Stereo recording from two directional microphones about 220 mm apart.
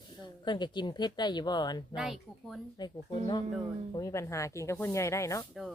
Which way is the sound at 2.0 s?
Centre (ahead or behind).